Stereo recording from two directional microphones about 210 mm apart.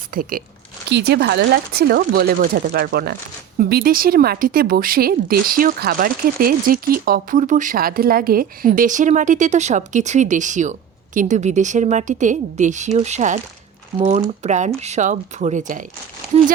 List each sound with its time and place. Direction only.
0.1 s speech: 45° right (ahead or behind)
14.4 s speech: 35° right (ahead or behind)